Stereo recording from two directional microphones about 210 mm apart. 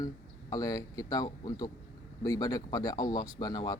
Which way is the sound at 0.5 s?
15° left (ahead or behind).